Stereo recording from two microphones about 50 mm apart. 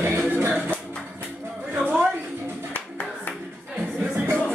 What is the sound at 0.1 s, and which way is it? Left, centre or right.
Music, right.